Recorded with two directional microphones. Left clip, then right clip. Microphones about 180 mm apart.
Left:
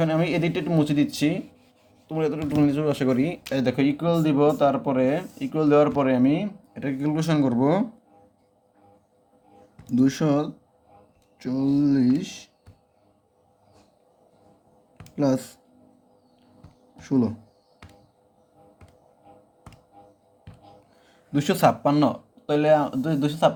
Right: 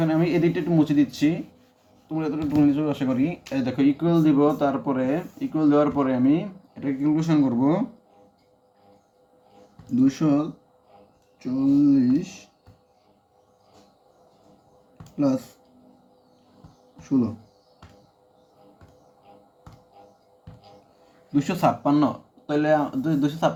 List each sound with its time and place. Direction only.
0.0 s speech: 75° left (ahead or behind)
9.9 s speech: 60° left (ahead or behind)
15.2 s speech: 55° left (ahead or behind)
17.0 s speech: 55° left (ahead or behind)
21.3 s speech: 75° left (ahead or behind)